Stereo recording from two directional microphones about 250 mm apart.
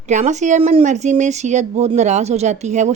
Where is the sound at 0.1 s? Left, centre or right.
Right.